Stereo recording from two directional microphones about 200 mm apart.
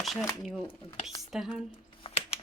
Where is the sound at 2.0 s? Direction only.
30° left (ahead or behind).